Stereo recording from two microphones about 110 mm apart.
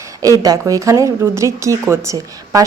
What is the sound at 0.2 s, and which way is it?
A woman's voice, 35° right (ahead or behind).